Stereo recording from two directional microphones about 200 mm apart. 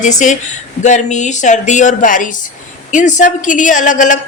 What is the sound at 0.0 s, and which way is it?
A woman's voice, 40° left (ahead or behind).